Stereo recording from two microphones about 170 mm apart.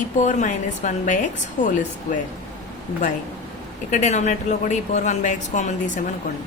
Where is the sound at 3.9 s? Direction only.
45° left (ahead or behind).